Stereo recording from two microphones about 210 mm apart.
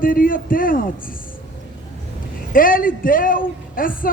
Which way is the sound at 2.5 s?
40° left (ahead or behind).